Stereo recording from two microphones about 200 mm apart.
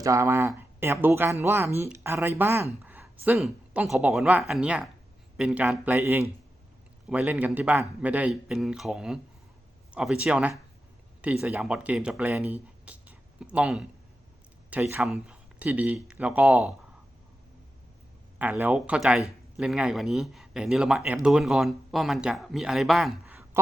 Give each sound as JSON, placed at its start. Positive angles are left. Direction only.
{"t": 0.0, "sound": "speech", "side_deg": -15}
{"t": 18.3, "sound": "speech", "side_deg": -10}